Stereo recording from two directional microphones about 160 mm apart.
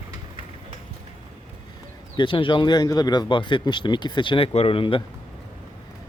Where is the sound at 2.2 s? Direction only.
30° left (ahead or behind).